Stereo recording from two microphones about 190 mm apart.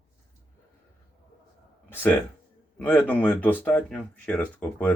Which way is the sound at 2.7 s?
10° left (ahead or behind).